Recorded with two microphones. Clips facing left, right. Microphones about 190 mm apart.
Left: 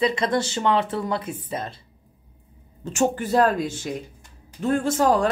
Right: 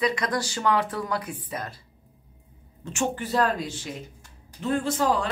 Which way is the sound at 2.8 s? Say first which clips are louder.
Left 5 dB; 40° left (ahead or behind).